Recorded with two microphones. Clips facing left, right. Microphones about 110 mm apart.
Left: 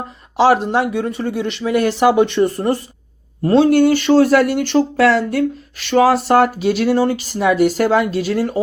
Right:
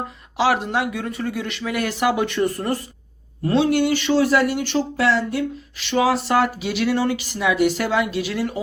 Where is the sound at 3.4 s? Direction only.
45° left (ahead or behind).